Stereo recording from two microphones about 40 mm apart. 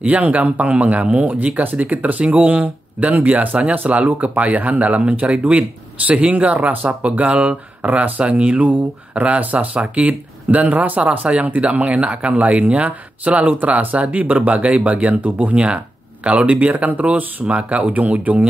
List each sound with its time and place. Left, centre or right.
0.0 s speech: right
1.6 s speech: right
3.7 s speech: right
9.4 s speech: right
11.0 s speech: right